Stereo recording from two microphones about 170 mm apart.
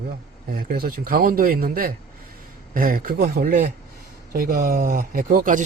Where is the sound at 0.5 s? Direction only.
60° right (ahead or behind).